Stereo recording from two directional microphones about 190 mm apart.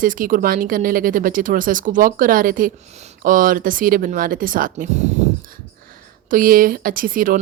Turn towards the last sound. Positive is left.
turn(degrees=-45)  # may be behind; listen again after turning